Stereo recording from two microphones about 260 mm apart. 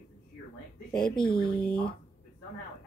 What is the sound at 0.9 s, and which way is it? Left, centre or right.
Speech, centre.